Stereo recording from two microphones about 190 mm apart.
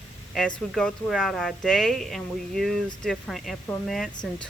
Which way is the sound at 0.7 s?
Centre (ahead or behind).